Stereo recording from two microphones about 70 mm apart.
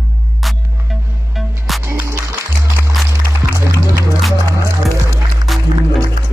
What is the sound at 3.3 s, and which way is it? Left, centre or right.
Music, right.